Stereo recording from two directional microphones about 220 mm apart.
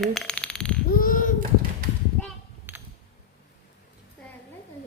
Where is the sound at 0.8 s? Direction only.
40° left (ahead or behind).